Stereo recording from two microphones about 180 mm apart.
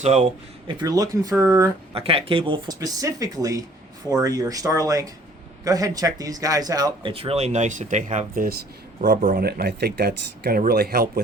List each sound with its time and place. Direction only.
0.0 s speech: 40° right (ahead or behind)
0.7 s speech: 20° right (ahead or behind)
1.9 s speech: 30° right (ahead or behind); by 11.2 s 55° right (ahead or behind)